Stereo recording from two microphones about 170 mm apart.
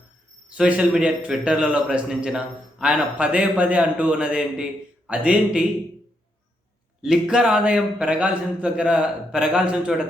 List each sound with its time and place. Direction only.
0.5 s a man's voice: 5° right (ahead or behind)
7.0 s a man's voice: 5° right (ahead or behind)